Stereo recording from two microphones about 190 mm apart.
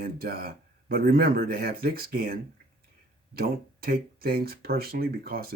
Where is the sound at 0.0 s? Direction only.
50° right (ahead or behind).